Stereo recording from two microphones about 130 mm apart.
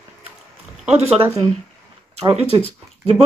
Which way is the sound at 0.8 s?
55° right (ahead or behind).